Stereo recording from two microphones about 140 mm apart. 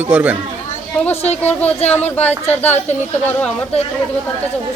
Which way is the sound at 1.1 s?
50° left (ahead or behind).